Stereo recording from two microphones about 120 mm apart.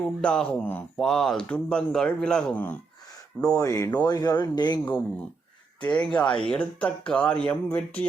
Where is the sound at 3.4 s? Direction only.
25° left (ahead or behind).